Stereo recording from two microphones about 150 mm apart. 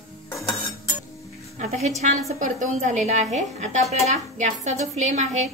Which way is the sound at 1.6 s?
50° right (ahead or behind).